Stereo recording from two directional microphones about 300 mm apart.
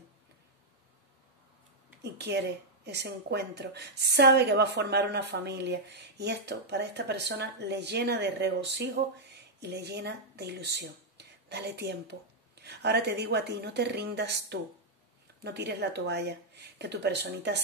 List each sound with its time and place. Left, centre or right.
2.1 s speech: right